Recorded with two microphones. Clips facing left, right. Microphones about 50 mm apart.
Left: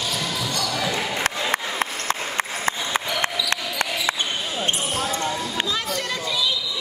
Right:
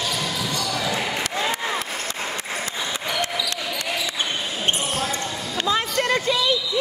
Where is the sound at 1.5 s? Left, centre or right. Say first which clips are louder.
Left 1 dB; left.